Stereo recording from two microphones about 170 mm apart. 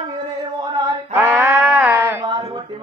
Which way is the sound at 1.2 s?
10° right (ahead or behind).